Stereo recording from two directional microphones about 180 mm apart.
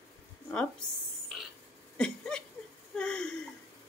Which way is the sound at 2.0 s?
5° left (ahead or behind).